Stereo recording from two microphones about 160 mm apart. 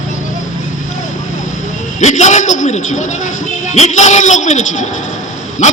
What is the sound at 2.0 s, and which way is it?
A man's voice, 50° left (ahead or behind).